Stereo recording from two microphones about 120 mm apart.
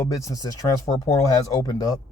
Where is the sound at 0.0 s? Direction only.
25° left (ahead or behind).